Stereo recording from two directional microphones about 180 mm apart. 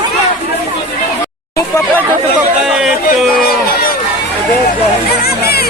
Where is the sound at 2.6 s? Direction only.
5° right (ahead or behind).